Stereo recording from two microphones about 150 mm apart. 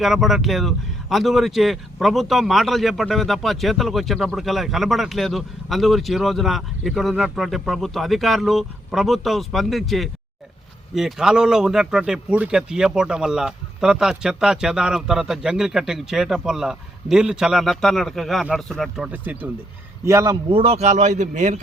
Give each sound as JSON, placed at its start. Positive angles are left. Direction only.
{"t": 0.0, "sound": "a man's voice", "side_deg": 0}
{"t": 20.5, "sound": "speech", "side_deg": -40}